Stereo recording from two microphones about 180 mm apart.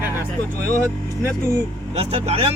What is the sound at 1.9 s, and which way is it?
Speech, 35° right (ahead or behind).